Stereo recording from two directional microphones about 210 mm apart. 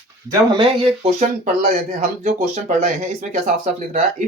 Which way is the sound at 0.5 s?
25° right (ahead or behind).